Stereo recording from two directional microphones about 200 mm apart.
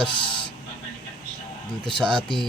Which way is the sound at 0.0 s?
25° left (ahead or behind).